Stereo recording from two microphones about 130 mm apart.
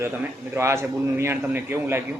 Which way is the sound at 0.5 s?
20° right (ahead or behind).